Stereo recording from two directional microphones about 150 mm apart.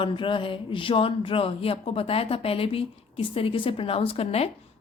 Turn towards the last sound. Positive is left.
turn(degrees=40)  # may be behind; listen again after turning